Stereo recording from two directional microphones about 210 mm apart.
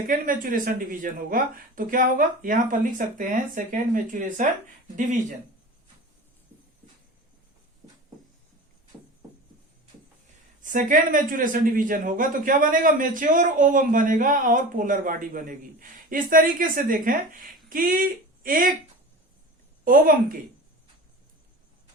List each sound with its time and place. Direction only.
0.1 s speech: 40° right (ahead or behind)
8.9 s a sound: 5° right (ahead or behind)
10.6 s speech: 40° right (ahead or behind)
19.8 s speech: 40° right (ahead or behind)